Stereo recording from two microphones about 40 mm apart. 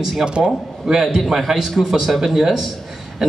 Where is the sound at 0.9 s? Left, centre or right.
Centre.